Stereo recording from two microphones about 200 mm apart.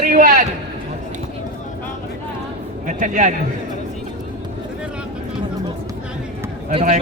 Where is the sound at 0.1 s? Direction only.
40° right (ahead or behind).